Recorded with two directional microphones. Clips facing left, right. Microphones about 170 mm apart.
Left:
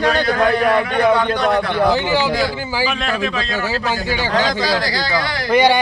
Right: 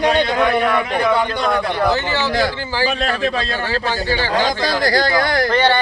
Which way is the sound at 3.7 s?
10° left (ahead or behind).